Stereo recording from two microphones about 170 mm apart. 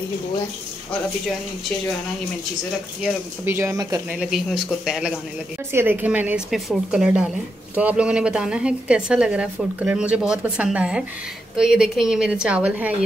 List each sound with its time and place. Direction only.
3.4 s a woman's voice: 15° right (ahead or behind)
4.1 s a woman's voice: 5° right (ahead or behind)